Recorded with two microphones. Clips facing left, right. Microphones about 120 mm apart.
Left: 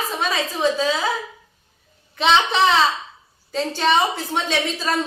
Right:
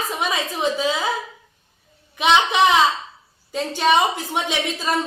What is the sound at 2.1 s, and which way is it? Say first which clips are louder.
A woman's voice: right 1 dB; 15° right (ahead or behind).